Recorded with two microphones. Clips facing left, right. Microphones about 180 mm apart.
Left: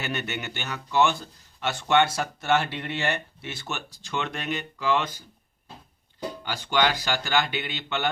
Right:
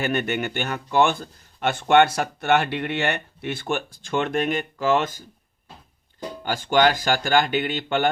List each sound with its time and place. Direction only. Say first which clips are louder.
0.0 s speech: right 8 dB; 50° right (ahead or behind)
6.4 s speech: right 6 dB; 50° right (ahead or behind)